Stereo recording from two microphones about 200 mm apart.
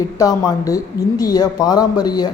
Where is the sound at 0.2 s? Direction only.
20° left (ahead or behind).